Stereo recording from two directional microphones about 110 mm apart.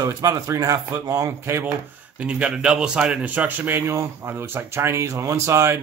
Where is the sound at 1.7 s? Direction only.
10° right (ahead or behind).